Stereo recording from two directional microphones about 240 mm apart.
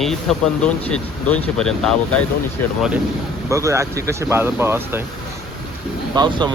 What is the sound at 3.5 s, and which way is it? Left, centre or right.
Speech, centre.